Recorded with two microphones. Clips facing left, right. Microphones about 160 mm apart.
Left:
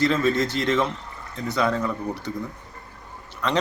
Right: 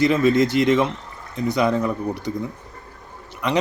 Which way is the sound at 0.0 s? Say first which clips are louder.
Right 4 dB; 10° right (ahead or behind).